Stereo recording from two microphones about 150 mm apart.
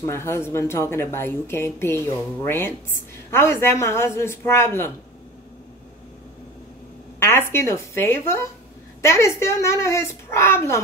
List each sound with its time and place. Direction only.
0.0 s speech: 20° left (ahead or behind)
7.2 s a child's voice: 15° left (ahead or behind)